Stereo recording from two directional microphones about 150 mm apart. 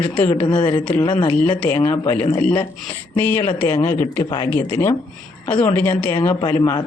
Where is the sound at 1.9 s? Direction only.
15° left (ahead or behind).